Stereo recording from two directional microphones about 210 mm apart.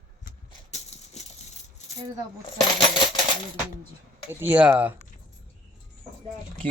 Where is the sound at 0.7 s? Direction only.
30° left (ahead or behind).